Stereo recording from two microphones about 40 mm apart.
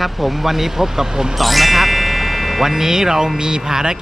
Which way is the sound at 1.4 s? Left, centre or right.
Centre.